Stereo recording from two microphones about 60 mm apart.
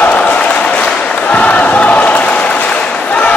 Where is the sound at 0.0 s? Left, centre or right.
Left.